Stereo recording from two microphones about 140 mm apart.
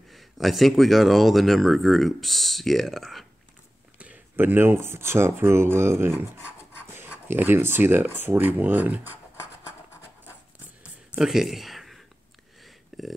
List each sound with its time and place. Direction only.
0.1 s speech: centre (ahead or behind)
4.0 s speech: 10° right (ahead or behind)
11.1 s speech: 5° right (ahead or behind)
12.6 s a sound: centre (ahead or behind)